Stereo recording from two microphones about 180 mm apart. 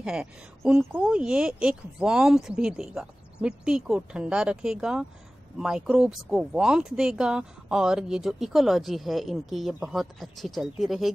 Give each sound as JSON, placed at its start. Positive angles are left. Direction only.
{"t": 0.0, "sound": "speech", "side_deg": -5}